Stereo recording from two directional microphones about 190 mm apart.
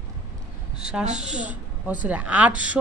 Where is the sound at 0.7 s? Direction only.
5° right (ahead or behind).